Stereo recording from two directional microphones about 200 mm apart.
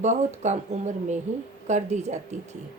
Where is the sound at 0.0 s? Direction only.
35° right (ahead or behind).